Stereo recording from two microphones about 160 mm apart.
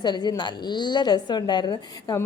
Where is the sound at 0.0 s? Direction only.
25° left (ahead or behind).